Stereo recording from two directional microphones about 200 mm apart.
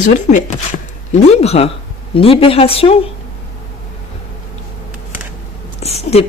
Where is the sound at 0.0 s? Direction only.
40° left (ahead or behind).